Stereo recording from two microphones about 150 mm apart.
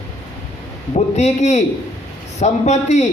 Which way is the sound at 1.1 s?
50° left (ahead or behind).